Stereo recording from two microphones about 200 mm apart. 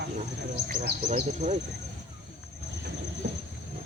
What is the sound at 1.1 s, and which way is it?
Speech, 35° right (ahead or behind).